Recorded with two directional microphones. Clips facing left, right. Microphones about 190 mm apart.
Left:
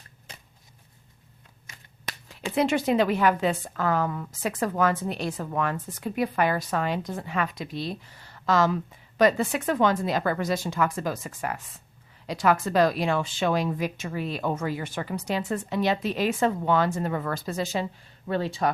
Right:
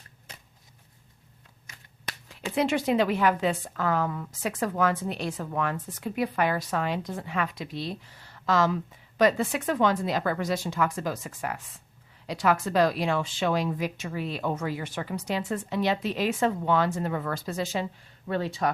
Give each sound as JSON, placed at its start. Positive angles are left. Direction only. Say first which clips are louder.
{"t": 1.6, "sound": "shuffling cards", "louder": "left 1 dB", "side_deg": 25}
{"t": 2.6, "sound": "speech", "louder": "left 2 dB", "side_deg": 45}